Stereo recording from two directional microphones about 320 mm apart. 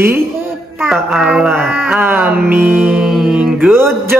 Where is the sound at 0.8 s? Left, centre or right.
Centre.